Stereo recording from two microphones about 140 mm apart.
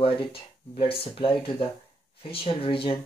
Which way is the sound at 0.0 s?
40° left (ahead or behind).